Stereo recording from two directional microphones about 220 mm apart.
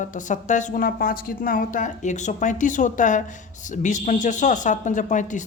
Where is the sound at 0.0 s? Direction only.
35° left (ahead or behind).